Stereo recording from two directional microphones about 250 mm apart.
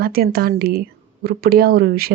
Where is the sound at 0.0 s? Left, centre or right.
Right.